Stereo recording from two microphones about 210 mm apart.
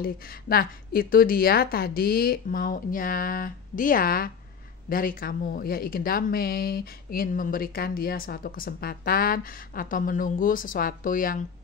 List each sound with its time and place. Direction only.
0.0 s speech: 45° left (ahead or behind)